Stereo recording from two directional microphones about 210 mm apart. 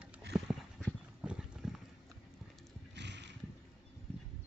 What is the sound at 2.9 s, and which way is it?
Horse, 55° right (ahead or behind).